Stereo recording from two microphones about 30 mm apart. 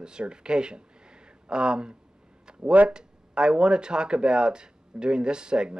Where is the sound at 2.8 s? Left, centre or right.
Right.